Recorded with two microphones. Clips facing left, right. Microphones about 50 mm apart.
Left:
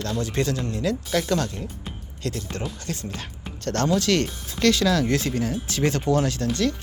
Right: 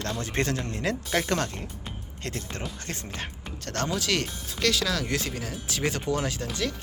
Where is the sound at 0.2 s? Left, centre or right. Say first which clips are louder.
Left 4 dB; right.